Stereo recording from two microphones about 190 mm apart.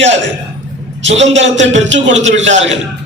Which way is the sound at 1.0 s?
75° right (ahead or behind).